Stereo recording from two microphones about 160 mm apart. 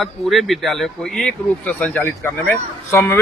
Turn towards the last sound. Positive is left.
turn(degrees=15)  # may be behind; listen again after turning